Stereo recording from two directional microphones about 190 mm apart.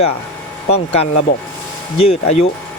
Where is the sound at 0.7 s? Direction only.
35° left (ahead or behind).